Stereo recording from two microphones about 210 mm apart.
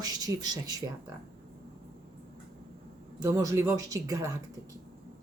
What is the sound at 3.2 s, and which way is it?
Speech, 15° right (ahead or behind).